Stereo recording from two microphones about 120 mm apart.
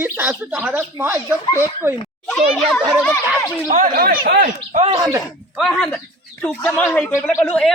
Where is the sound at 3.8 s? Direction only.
90° right.